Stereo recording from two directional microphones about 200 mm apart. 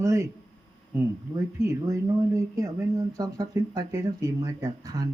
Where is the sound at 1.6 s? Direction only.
15° right (ahead or behind).